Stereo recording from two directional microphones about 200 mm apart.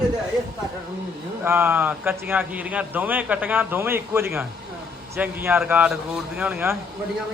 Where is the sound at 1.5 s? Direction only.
10° right (ahead or behind).